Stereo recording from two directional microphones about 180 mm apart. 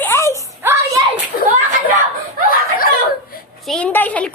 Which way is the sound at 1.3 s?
55° left (ahead or behind).